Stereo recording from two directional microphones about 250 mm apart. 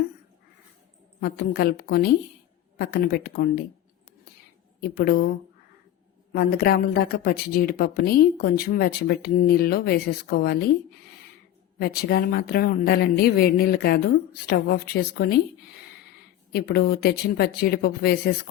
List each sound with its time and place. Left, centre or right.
1.2 s speech: left
4.8 s speech: left
6.3 s speech: left
11.8 s speech: left
16.5 s speech: left